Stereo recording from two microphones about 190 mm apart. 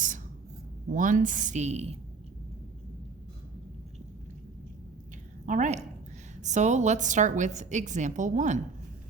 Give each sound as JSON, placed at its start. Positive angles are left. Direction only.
{"t": 0.9, "sound": "a woman's voice", "side_deg": -45}
{"t": 5.5, "sound": "a woman's voice", "side_deg": -40}